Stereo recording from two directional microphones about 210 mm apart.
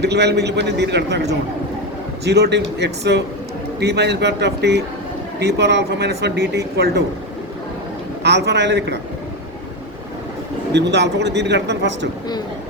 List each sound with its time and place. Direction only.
0.0 s a man's voice: 55° right (ahead or behind)
8.2 s a man's voice: 55° right (ahead or behind)
10.7 s a man's voice: 55° right (ahead or behind)